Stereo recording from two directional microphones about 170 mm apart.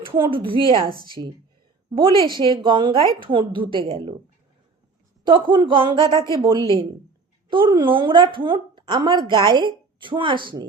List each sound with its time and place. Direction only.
0.3 s a woman's voice: 30° right (ahead or behind)
5.2 s a woman's voice: 30° right (ahead or behind)